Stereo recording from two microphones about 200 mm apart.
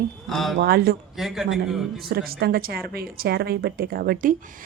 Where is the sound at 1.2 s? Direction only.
Centre (ahead or behind).